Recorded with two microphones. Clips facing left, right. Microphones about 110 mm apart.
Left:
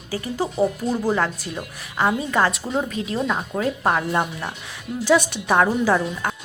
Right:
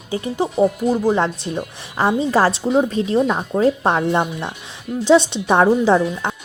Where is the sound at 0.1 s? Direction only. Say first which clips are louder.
Right 4 dB; 25° right (ahead or behind).